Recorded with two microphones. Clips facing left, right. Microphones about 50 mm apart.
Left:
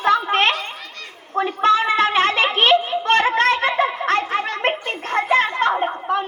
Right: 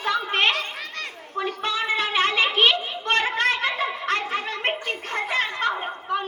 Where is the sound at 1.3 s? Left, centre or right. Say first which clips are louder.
Left 9 dB; left.